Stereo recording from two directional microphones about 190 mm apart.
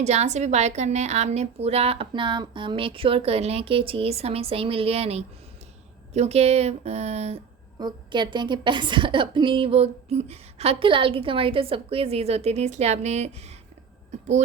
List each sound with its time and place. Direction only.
0.0 s a woman's voice: 35° right (ahead or behind)
7.8 s a woman's voice: 25° right (ahead or behind)